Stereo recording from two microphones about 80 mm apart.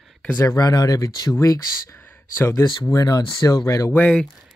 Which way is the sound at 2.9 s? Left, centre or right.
Left.